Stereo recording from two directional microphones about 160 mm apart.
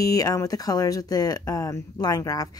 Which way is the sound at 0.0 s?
20° left (ahead or behind).